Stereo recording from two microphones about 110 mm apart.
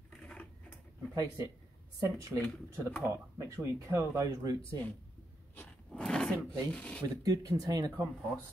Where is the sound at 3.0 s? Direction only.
25° right (ahead or behind).